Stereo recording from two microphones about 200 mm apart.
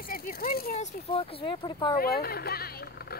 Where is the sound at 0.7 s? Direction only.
30° left (ahead or behind).